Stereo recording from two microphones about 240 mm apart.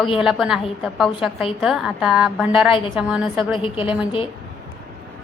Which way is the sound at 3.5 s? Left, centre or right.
Left.